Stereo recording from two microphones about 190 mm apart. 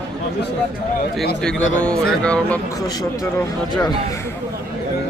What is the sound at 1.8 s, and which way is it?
Speech, 5° left (ahead or behind).